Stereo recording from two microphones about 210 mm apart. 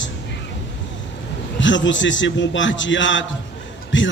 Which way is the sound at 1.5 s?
60° left (ahead or behind).